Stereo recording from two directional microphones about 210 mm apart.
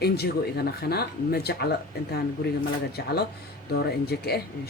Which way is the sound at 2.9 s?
50° left (ahead or behind).